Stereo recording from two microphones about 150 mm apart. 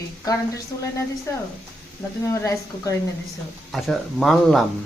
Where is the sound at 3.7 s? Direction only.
Centre (ahead or behind).